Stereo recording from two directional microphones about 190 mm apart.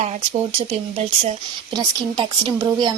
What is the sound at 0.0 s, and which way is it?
Speech, 35° right (ahead or behind).